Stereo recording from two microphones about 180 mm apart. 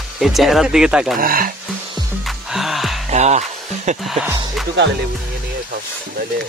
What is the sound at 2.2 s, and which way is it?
Music, centre (ahead or behind).